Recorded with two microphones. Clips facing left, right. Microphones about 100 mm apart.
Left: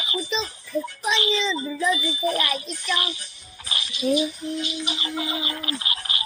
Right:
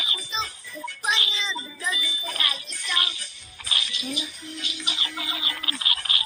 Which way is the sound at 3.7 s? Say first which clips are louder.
Left 10 dB; 25° left (ahead or behind).